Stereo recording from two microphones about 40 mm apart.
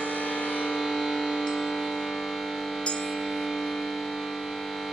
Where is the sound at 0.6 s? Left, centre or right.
Centre.